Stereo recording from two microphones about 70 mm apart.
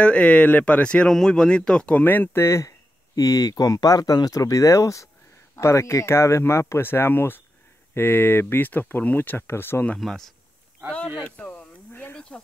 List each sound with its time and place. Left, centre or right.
0.0 s speech: centre
2.0 s speech: left
2.4 s speech: left
3.2 s speech: left
9.9 s speech: centre
11.2 s speech: centre
11.9 s snake: left